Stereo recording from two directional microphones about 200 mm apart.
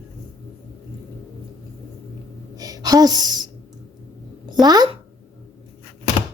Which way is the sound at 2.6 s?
20° right (ahead or behind).